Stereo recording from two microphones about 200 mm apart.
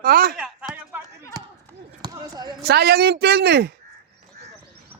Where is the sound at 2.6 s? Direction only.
50° right (ahead or behind).